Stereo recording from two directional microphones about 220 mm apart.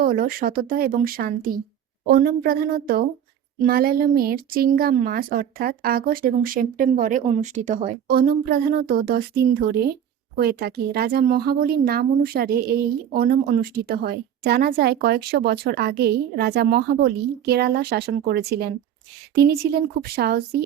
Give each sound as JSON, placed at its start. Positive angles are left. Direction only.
{"t": 0.0, "sound": "speech", "side_deg": -40}